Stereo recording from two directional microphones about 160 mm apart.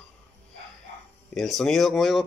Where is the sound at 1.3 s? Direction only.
Centre (ahead or behind).